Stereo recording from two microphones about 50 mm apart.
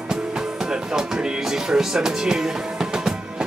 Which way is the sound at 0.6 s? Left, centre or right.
Centre.